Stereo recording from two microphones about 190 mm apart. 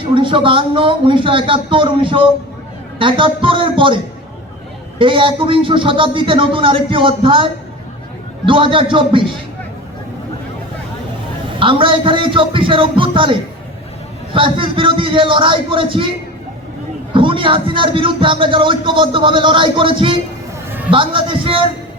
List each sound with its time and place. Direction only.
0.0 s speech: 25° right (ahead or behind)
8.4 s speech: 25° right (ahead or behind)
11.6 s speech: 25° right (ahead or behind)
14.3 s speech: 25° right (ahead or behind)
17.2 s speech: 25° right (ahead or behind)
20.7 s a sound: 10° right (ahead or behind)
20.9 s speech: 25° right (ahead or behind)